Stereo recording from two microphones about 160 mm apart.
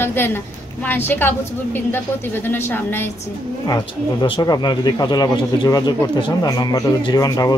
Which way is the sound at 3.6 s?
30° left (ahead or behind).